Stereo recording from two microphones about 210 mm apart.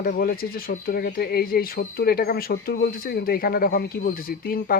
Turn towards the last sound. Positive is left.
turn(degrees=45)  # may be behind; listen again after turning